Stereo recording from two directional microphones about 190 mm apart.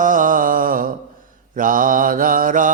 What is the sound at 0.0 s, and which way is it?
Mantra, 45° right (ahead or behind).